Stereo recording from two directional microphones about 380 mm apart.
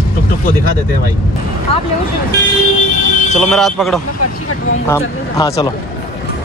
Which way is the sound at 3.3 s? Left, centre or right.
Centre.